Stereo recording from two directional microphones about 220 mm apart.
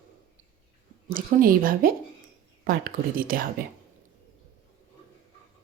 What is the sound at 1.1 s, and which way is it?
A woman's voice, 40° right (ahead or behind).